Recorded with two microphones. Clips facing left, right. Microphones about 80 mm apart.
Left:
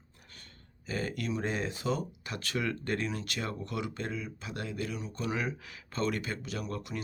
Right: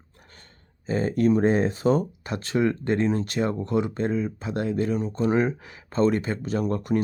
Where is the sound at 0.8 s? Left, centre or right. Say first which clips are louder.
Right 13 dB; right.